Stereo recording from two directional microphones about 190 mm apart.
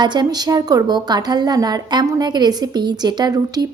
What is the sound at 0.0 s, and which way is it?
A woman's voice, 25° right (ahead or behind).